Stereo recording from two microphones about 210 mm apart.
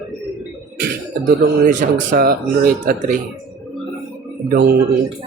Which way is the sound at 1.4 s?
40° right (ahead or behind).